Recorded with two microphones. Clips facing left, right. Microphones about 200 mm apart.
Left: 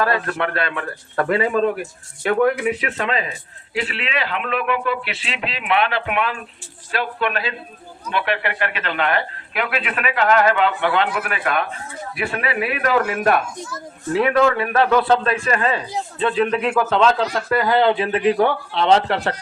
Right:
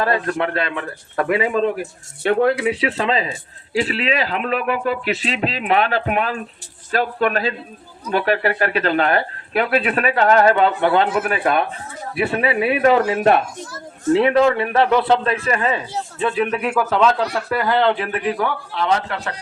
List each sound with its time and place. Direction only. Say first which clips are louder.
0.0 s speech: right 1 dB; 25° right (ahead or behind)
11.1 s a man's voice: right 4 dB; 25° right (ahead or behind); by 17.9 s 5° left (ahead or behind)
17.9 s speech: left 4 dB; 20° left (ahead or behind)